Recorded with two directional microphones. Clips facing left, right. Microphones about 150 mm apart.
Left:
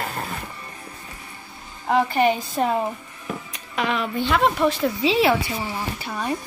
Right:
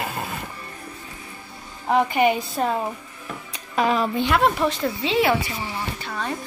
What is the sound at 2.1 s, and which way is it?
Speech, 10° right (ahead or behind).